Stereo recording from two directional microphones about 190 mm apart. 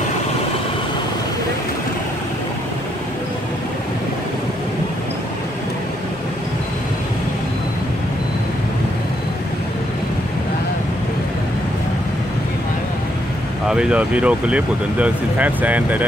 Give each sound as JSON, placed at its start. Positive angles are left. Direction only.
{"t": 13.7, "sound": "speech", "side_deg": -5}